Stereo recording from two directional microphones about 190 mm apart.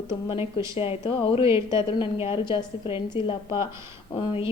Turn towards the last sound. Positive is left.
turn(degrees=25)  # may be behind; listen again after turning